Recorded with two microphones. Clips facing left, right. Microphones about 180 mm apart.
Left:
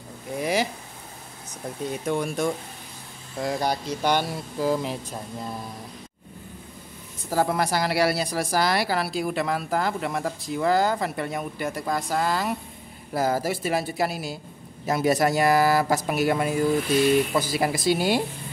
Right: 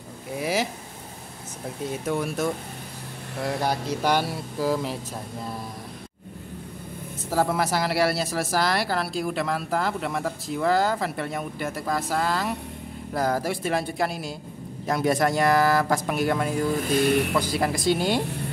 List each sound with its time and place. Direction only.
0.4 s speech: 5° right (ahead or behind)
2.0 s speech: 5° right (ahead or behind)
7.2 s speech: centre (ahead or behind)
16.9 s speech: 60° right (ahead or behind)
17.4 s speech: 5° left (ahead or behind)